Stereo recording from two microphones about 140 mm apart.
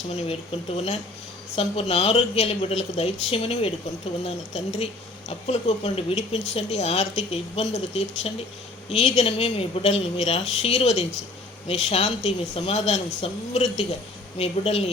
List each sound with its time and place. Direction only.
1.5 s a woman's voice: 45° left (ahead or behind)